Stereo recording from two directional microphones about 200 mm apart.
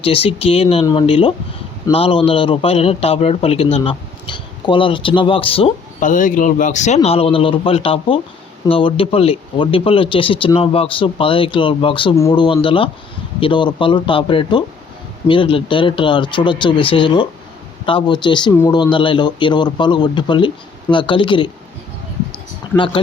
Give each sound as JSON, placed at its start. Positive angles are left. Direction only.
{"t": 0.0, "sound": "a man's voice", "side_deg": 30}
{"t": 6.0, "sound": "a man's voice", "side_deg": 40}
{"t": 22.7, "sound": "a man's voice", "side_deg": 25}